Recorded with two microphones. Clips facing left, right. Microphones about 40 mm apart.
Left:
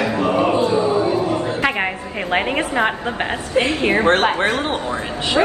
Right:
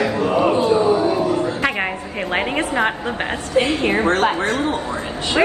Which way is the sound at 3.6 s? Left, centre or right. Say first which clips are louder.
Left 2 dB; left.